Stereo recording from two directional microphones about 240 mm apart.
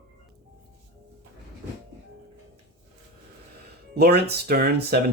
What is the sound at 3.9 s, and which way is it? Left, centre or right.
Speech, right.